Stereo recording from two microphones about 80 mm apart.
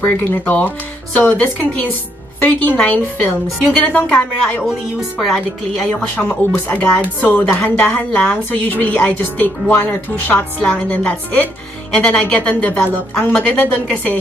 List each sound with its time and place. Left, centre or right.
0.0 s speech: left
6.1 s a woman's voice: centre